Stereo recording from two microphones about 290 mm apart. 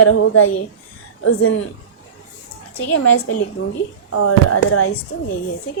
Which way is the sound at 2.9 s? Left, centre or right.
Left.